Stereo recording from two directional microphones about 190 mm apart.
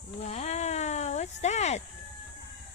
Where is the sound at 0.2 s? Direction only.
35° left (ahead or behind).